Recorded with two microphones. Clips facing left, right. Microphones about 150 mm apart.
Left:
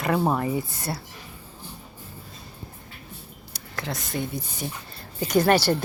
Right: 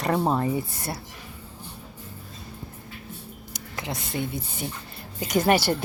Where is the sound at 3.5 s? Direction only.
20° right (ahead or behind).